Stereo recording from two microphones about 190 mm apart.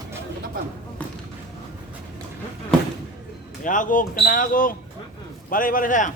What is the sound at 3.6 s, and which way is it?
Speech, 45° left (ahead or behind).